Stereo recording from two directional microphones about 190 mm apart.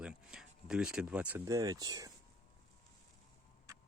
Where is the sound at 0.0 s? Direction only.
5° right (ahead or behind); by 2.1 s 20° right (ahead or behind).